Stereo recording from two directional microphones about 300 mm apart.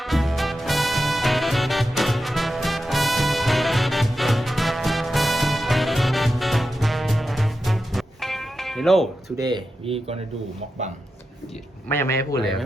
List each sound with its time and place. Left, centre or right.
0.0 s music: centre
9.4 s speech: centre
11.9 s a man's voice: centre